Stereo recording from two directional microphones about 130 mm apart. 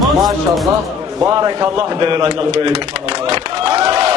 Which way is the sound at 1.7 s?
40° right (ahead or behind).